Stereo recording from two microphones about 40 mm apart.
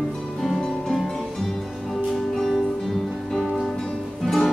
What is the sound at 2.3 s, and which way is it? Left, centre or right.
Music, centre.